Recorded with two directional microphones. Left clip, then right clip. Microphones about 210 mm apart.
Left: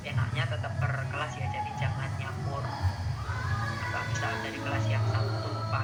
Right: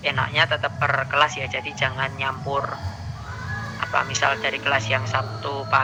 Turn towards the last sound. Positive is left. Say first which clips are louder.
# right 12 dB
turn(degrees=-40)  # may be behind; listen again after turning